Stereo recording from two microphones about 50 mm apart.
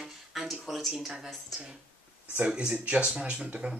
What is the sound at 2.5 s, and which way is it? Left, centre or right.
Speech, centre.